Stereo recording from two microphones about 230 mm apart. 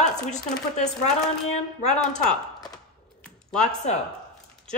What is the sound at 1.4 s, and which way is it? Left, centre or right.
Speech, left.